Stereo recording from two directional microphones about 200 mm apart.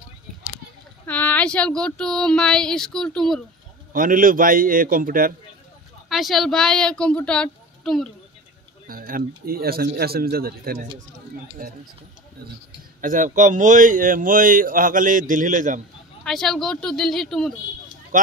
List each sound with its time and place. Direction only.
1.0 s speech: 10° left (ahead or behind)
3.9 s a man's voice: 45° right (ahead or behind)
6.0 s speech: centre (ahead or behind)
8.8 s a man's voice: 45° right (ahead or behind)
13.0 s speech: 40° right (ahead or behind)
16.3 s speech: centre (ahead or behind)
18.1 s a sound: 40° right (ahead or behind)